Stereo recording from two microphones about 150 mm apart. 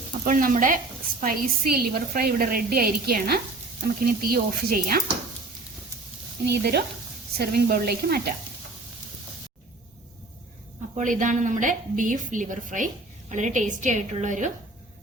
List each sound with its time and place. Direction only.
0.3 s a woman's voice: 65° right (ahead or behind)
1.2 s a woman's voice: 80° right
6.4 s a woman's voice: 90° right
10.9 s a woman's voice: 60° right (ahead or behind)